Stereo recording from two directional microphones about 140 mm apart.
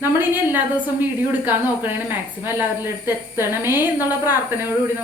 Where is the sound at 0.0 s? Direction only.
15° right (ahead or behind).